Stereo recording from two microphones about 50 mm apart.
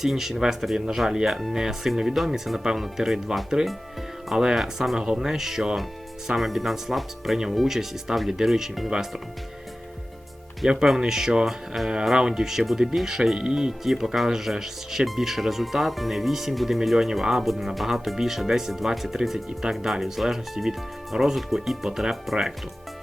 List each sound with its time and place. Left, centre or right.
0.0 s speech: centre
10.6 s speech: centre
21.8 s speech: centre